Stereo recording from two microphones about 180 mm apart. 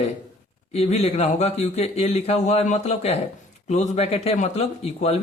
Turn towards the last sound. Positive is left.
turn(degrees=35)  # may be behind; listen again after turning